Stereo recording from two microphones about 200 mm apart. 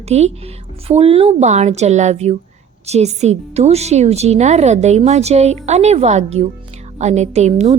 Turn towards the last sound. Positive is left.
turn(degrees=-35)  # may be behind; listen again after turning